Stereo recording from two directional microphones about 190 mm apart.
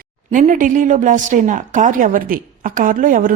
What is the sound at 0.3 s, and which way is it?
A woman's voice, 40° right (ahead or behind).